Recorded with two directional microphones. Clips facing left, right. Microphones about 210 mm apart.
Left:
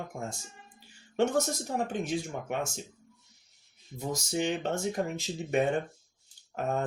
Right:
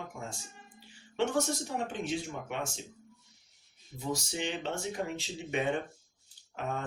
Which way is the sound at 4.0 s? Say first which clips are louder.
Left 4 dB; 45° left (ahead or behind).